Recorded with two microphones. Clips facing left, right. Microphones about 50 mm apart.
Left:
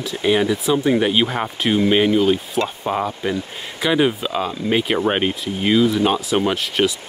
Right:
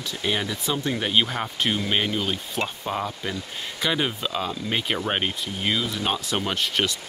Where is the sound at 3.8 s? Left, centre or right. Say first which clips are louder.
Left 8 dB; centre.